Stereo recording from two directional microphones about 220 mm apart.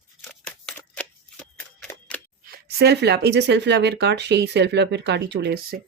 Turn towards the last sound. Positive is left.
turn(degrees=-50)  # may be behind; listen again after turning